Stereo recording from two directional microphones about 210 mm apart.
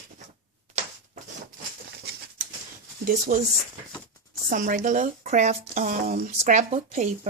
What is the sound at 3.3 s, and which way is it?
Speech, 40° right (ahead or behind).